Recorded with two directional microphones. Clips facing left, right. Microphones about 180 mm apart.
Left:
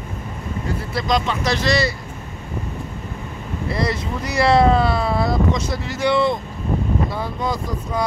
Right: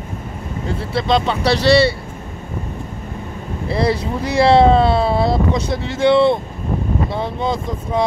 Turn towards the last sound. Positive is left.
turn(degrees=-25)  # may be behind; listen again after turning